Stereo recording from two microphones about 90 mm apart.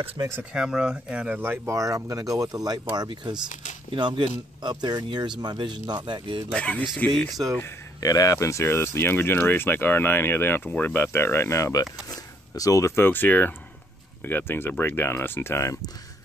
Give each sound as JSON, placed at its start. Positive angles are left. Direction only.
{"t": 0.5, "sound": "speech", "side_deg": -10}
{"t": 1.4, "sound": "speech", "side_deg": -25}
{"t": 1.8, "sound": "speech", "side_deg": -40}
{"t": 3.9, "sound": "speech", "side_deg": -70}
{"t": 4.6, "sound": "speech", "side_deg": -55}
{"t": 6.5, "sound": "speech", "side_deg": 10}
{"t": 8.0, "sound": "speech", "side_deg": 40}